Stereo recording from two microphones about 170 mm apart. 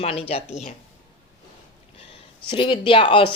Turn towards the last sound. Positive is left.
turn(degrees=30)  # may be behind; listen again after turning